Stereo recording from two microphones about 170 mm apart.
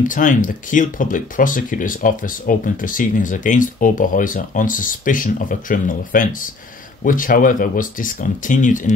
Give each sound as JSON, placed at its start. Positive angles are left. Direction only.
{"t": 0.1, "sound": "speech", "side_deg": 50}